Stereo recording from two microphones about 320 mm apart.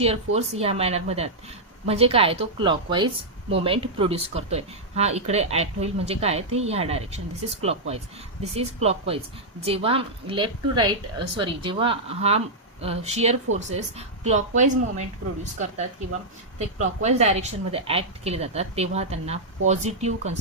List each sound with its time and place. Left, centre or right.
0.0 s a woman's voice: centre
16.6 s a woman's voice: right